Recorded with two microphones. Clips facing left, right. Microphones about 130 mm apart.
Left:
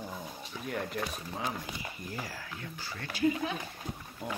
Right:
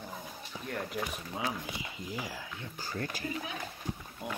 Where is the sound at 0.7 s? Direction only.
Centre (ahead or behind).